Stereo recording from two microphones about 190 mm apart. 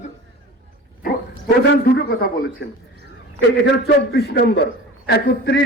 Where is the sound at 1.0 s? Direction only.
60° left (ahead or behind).